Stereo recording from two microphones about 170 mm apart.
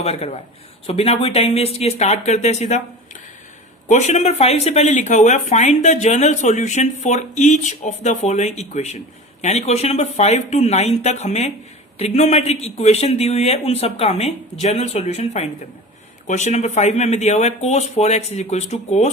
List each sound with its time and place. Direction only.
0.0 s speech: 35° left (ahead or behind)
3.8 s speech: 45° left (ahead or behind)